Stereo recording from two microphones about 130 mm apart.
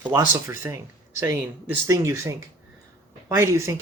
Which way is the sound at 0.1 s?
20° right (ahead or behind).